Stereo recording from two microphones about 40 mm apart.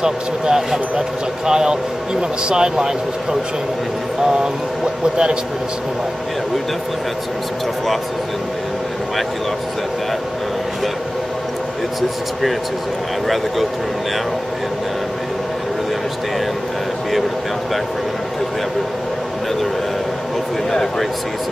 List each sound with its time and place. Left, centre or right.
0.0 s speech: centre
5.1 s speech: centre
20.7 s speech: centre